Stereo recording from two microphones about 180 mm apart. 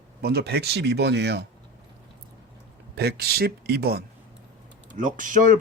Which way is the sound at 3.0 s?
60° right (ahead or behind).